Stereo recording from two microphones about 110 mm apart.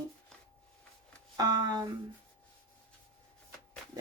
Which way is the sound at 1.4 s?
35° right (ahead or behind).